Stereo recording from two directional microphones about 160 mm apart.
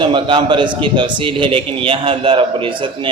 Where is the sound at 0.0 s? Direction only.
30° right (ahead or behind).